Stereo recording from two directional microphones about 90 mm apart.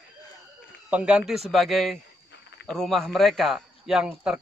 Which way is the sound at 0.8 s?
15° right (ahead or behind).